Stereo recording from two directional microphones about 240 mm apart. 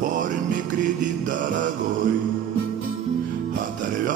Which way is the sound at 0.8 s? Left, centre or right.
Right.